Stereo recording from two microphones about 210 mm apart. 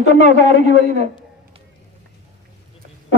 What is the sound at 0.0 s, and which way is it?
Speech, 35° right (ahead or behind).